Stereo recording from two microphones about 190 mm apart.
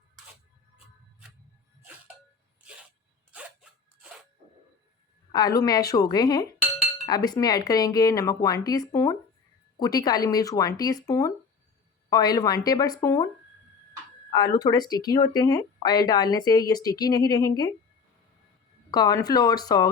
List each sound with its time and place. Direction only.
3.3 s a sound: 5° right (ahead or behind)
5.3 s speech: 20° left (ahead or behind)
18.9 s speech: 20° left (ahead or behind)